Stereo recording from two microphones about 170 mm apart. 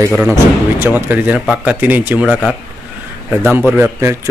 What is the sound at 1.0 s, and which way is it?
Speech, 10° right (ahead or behind).